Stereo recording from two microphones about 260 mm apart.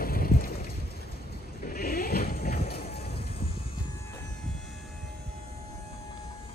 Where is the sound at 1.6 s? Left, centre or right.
Left.